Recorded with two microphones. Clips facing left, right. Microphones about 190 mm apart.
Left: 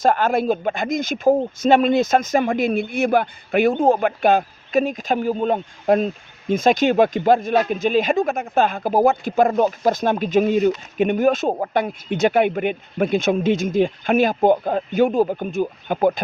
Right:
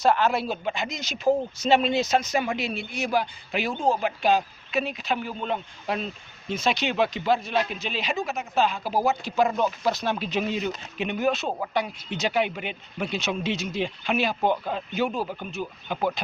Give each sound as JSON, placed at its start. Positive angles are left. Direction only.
{"t": 0.0, "sound": "speech", "side_deg": 50}